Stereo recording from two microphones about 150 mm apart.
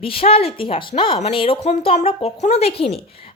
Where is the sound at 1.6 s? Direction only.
50° left (ahead or behind).